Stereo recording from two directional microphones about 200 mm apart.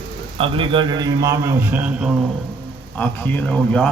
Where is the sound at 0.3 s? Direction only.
25° right (ahead or behind); by 2.1 s 5° right (ahead or behind).